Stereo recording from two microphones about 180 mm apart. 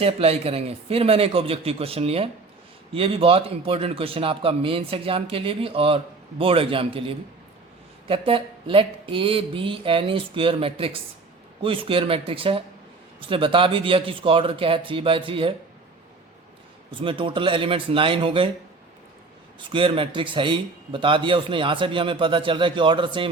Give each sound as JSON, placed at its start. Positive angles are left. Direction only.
{"t": 0.0, "sound": "a man's voice", "side_deg": -35}
{"t": 17.0, "sound": "a man's voice", "side_deg": -30}
{"t": 19.5, "sound": "a man's voice", "side_deg": -30}